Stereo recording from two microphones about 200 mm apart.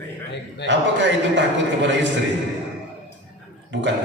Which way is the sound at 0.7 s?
65° right (ahead or behind).